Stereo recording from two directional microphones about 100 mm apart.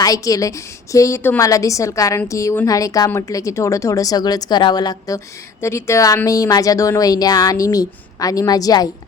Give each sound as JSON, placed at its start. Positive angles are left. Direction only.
{"t": 0.0, "sound": "speech", "side_deg": 35}
{"t": 5.5, "sound": "speech", "side_deg": 25}